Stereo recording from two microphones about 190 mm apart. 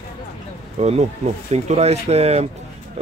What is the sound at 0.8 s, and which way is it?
Speech, 35° right (ahead or behind).